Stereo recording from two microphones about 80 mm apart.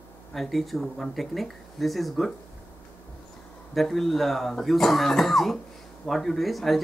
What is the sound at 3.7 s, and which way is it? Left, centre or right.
Speech, centre.